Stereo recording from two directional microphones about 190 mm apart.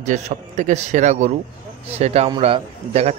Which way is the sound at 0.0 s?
40° right (ahead or behind).